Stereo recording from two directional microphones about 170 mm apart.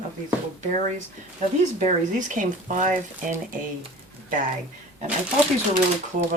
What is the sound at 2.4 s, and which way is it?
Speech, 50° right (ahead or behind).